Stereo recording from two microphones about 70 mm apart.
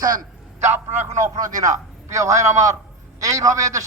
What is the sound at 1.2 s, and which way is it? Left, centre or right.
A man's voice, right.